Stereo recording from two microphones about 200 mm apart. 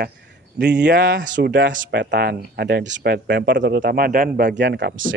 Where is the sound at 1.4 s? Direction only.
60° right (ahead or behind).